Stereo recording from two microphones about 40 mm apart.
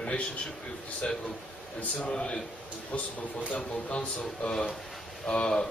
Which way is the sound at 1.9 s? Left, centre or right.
Left.